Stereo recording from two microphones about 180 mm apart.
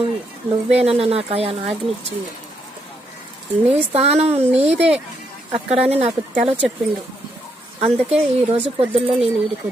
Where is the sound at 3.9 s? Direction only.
35° right (ahead or behind).